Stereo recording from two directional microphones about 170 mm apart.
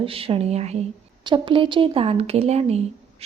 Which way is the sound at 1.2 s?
30° right (ahead or behind).